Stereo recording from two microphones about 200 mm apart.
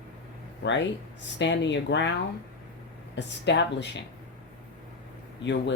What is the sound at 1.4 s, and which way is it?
Speech, 65° left (ahead or behind).